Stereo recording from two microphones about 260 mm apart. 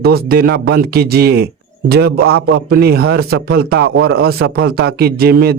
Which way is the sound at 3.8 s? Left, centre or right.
Right.